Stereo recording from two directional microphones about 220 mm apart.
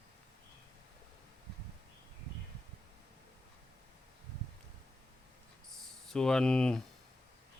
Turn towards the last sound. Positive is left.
turn(degrees=5)  # may be behind; listen again after turning